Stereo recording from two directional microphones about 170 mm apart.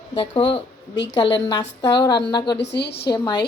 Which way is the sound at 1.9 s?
25° left (ahead or behind).